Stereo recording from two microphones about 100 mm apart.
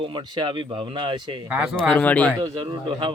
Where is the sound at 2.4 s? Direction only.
50° right (ahead or behind).